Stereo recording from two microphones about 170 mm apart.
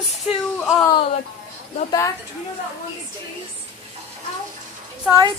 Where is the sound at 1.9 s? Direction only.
20° left (ahead or behind).